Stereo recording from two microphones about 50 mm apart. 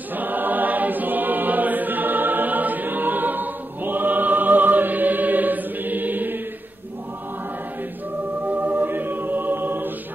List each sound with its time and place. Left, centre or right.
0.1 s choir: right
8.5 s music: right